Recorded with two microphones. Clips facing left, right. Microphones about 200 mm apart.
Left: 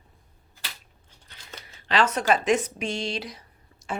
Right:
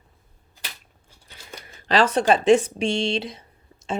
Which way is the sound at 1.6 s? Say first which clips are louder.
Right 5 dB; 50° right (ahead or behind).